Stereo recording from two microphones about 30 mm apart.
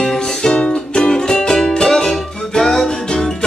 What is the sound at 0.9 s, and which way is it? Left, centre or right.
Music, left.